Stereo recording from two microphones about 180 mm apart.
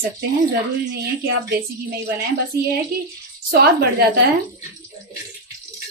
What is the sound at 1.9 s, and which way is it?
Speech, 60° right (ahead or behind).